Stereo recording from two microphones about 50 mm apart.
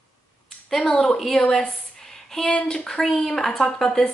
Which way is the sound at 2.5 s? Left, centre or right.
Centre.